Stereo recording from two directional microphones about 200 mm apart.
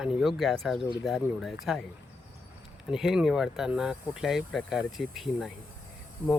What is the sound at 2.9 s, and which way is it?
Speech, centre (ahead or behind).